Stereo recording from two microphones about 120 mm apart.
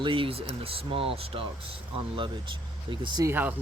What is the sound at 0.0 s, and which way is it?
Speech, 45° right (ahead or behind).